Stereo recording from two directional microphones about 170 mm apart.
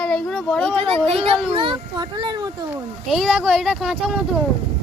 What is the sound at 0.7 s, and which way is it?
A child's voice, 35° right (ahead or behind).